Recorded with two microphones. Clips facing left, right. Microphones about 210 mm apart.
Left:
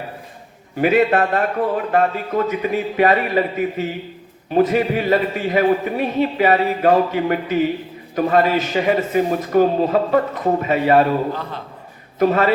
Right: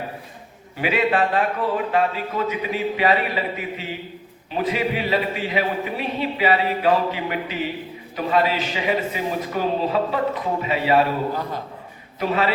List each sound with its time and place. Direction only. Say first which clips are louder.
0.8 s a man's voice: left 5 dB; 45° left (ahead or behind)
12.2 s a man's voice: left 6 dB; 50° left (ahead or behind)